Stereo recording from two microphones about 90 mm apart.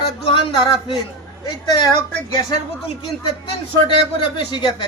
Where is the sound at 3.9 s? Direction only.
65° left (ahead or behind).